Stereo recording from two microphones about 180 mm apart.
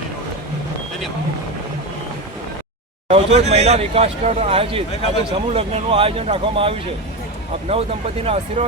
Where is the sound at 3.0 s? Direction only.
35° right (ahead or behind).